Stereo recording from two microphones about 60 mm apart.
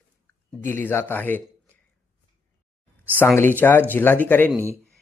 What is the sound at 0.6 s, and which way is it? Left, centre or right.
Speech, left.